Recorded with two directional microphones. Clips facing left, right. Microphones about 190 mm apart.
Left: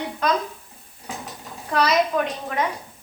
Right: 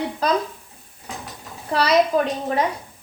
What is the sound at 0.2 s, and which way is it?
Speech, 35° right (ahead or behind).